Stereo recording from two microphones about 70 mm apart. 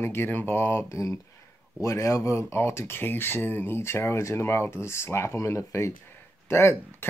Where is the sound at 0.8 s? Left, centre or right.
Left.